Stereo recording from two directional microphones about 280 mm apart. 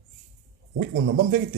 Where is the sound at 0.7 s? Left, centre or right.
Right.